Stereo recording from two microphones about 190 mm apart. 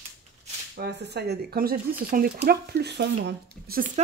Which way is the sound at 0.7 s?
60° right (ahead or behind).